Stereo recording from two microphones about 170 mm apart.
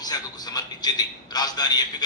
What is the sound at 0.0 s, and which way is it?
A man's voice, 25° left (ahead or behind).